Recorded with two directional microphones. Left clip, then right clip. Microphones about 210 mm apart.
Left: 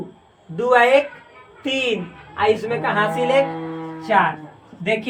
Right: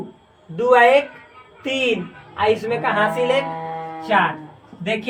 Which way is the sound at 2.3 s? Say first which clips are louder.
Even; 20° left (ahead or behind).